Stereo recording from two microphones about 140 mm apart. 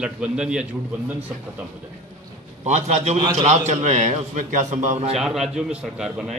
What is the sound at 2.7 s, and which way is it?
A man's voice, 55° right (ahead or behind).